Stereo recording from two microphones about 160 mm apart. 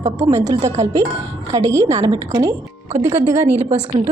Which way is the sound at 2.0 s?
20° right (ahead or behind).